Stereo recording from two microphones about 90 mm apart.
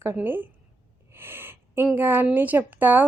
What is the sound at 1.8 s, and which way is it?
Speech, 20° right (ahead or behind).